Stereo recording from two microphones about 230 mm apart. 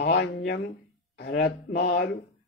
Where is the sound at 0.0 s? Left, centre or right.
Left.